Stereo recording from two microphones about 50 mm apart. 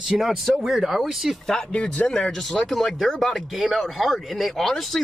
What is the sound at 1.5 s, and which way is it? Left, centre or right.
Speech, centre.